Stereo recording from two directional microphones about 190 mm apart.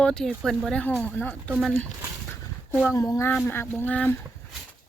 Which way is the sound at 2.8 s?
20° left (ahead or behind).